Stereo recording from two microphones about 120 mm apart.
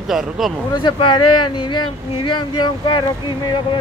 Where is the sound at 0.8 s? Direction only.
40° left (ahead or behind).